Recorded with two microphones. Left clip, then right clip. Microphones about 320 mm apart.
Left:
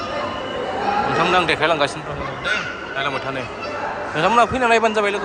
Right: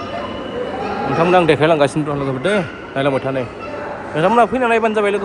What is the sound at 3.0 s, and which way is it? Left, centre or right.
A man's voice, centre.